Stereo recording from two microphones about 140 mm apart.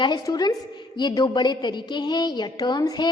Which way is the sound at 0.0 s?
30° left (ahead or behind).